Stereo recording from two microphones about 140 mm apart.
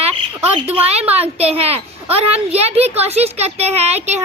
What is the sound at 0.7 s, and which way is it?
Speech, 45° right (ahead or behind).